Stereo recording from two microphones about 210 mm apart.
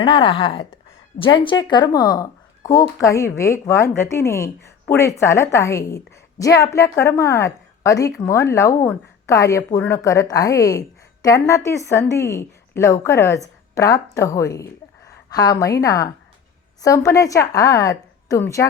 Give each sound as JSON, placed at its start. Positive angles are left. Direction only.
{"t": 0.0, "sound": "speech", "side_deg": 25}